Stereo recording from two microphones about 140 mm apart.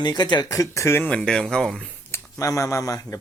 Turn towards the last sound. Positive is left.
turn(degrees=25)  # may be behind; listen again after turning